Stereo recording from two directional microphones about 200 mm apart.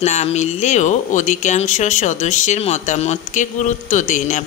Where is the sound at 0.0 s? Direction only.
35° left (ahead or behind).